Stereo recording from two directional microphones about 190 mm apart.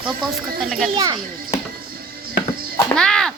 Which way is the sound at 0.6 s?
Centre (ahead or behind).